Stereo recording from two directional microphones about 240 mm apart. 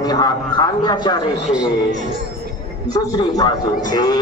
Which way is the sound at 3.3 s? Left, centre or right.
Centre.